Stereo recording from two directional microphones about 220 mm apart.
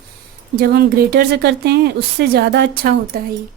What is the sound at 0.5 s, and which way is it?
Speech, 45° right (ahead or behind).